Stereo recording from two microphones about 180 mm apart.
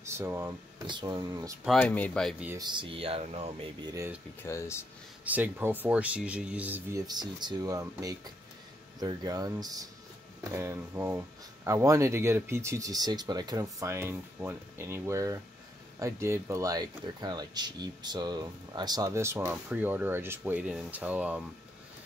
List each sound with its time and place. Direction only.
0.0 s a sound: 15° right (ahead or behind)
0.8 s speech: 25° right (ahead or behind)
1.8 s speech: 10° left (ahead or behind)
2.5 s speech: 25° right (ahead or behind)
3.9 s speech: 15° right (ahead or behind)
4.4 s speech: 15° left (ahead or behind)
5.2 s speech: 10° right (ahead or behind)
7.1 s speech: 25° right (ahead or behind); by 21.5 s 5° right (ahead or behind)